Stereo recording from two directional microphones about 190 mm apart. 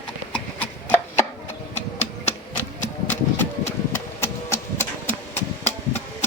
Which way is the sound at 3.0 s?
10° left (ahead or behind).